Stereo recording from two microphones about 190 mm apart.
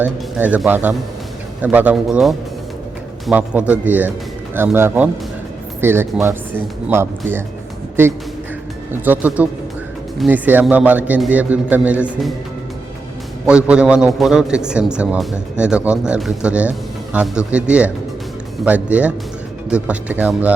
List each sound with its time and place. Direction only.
0.0 s a man's voice: 10° right (ahead or behind)
8.9 s a man's voice: 10° right (ahead or behind)
13.5 s a man's voice: 5° right (ahead or behind)